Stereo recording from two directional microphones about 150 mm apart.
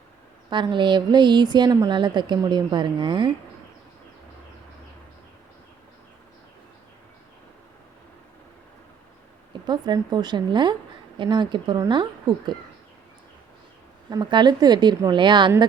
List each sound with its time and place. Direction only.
0.5 s speech: 30° right (ahead or behind)
9.5 s a woman's voice: 30° right (ahead or behind)
14.1 s speech: 30° right (ahead or behind)